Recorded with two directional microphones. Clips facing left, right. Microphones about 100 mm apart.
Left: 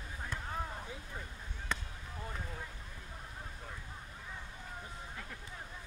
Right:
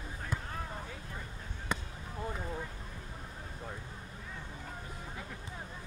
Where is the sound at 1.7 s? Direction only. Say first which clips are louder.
Right 3 dB; 15° right (ahead or behind).